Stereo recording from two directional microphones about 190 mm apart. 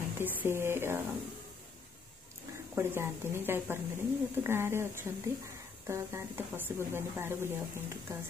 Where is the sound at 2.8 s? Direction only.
15° right (ahead or behind).